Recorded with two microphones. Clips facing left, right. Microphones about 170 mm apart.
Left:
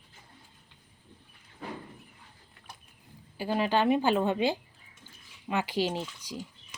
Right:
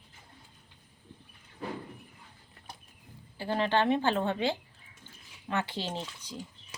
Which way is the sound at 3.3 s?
10° left (ahead or behind).